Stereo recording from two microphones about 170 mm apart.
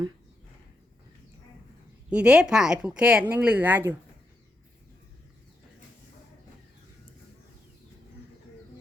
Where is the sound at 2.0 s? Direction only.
5° right (ahead or behind).